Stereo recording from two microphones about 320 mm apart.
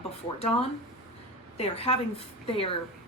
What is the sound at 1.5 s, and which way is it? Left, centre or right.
A woman's voice, centre.